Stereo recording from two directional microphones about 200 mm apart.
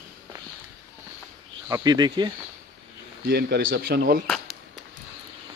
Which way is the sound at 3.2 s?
50° right (ahead or behind).